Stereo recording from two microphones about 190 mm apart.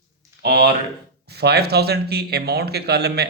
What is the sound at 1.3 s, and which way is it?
Speech, 60° right (ahead or behind).